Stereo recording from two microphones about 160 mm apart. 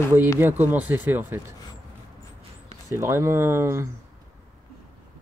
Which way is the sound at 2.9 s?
15° right (ahead or behind).